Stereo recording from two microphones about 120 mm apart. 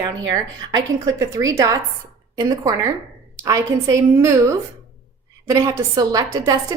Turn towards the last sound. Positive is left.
turn(degrees=-30)  # may be behind; listen again after turning